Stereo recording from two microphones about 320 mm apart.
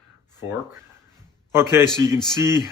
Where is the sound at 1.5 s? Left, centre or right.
Centre.